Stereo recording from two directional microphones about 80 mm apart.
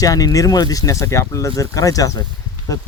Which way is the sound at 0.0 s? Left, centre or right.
Left.